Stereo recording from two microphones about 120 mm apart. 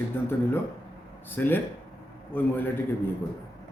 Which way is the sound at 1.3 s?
15° left (ahead or behind).